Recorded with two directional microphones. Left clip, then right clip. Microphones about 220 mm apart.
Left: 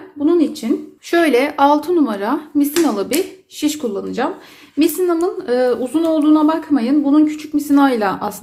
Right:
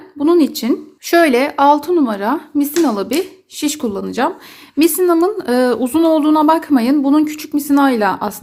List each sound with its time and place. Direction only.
0.3 s speech: 45° right (ahead or behind); by 8.4 s 30° right (ahead or behind)